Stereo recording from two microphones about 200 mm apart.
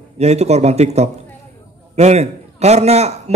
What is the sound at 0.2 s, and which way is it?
A man's voice, 35° right (ahead or behind).